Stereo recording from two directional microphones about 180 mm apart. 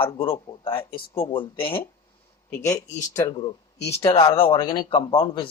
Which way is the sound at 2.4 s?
15° left (ahead or behind).